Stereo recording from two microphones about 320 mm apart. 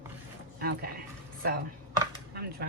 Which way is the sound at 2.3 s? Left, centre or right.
Right.